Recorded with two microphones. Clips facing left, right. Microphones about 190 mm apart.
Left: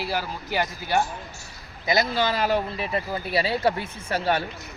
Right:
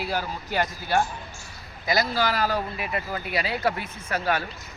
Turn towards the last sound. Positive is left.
turn(degrees=30)  # may be behind; listen again after turning